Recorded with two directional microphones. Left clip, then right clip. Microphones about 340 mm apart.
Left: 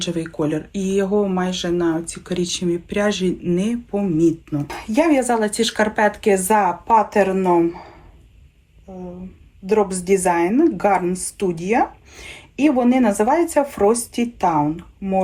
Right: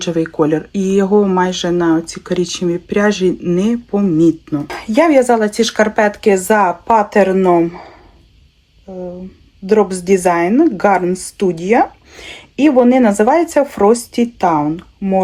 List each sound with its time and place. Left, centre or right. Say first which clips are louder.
0.0 s speech: right 8 dB; centre
9.6 s speech: right 5 dB; right